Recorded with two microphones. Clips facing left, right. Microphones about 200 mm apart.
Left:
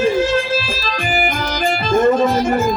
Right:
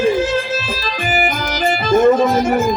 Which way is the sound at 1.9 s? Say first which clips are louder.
Right 2 dB; 5° right (ahead or behind).